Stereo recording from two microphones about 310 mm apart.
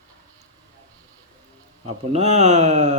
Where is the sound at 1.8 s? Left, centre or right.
Right.